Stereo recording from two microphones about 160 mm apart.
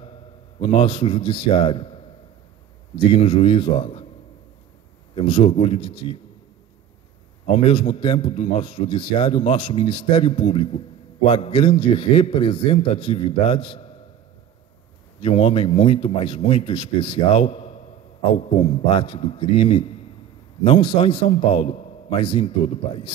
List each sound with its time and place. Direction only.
0.6 s a man's voice: 30° left (ahead or behind)
3.1 s a man's voice: 35° left (ahead or behind)
5.1 s a man's voice: 35° left (ahead or behind)
7.5 s a man's voice: 35° left (ahead or behind)
15.1 s a man's voice: 35° left (ahead or behind)